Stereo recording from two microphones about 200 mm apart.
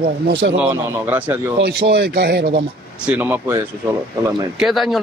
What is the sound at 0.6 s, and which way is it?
Speech, 10° right (ahead or behind).